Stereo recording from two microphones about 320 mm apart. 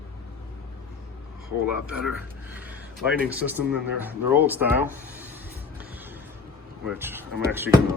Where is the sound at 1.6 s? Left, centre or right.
Centre.